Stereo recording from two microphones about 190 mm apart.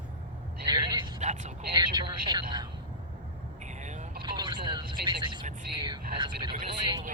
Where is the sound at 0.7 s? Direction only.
20° right (ahead or behind).